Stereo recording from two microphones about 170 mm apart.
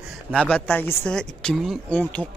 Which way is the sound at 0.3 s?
5° left (ahead or behind).